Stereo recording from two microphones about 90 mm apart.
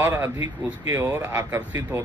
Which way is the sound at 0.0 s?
25° right (ahead or behind).